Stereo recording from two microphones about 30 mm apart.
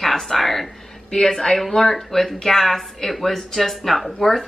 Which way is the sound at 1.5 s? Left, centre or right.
Centre.